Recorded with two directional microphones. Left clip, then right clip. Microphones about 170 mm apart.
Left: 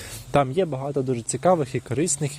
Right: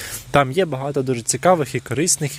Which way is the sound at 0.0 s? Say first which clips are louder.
Right 4 dB; 5° right (ahead or behind).